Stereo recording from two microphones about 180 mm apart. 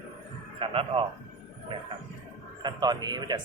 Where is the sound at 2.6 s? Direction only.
20° right (ahead or behind).